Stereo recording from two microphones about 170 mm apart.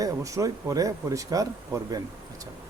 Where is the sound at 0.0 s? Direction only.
20° right (ahead or behind).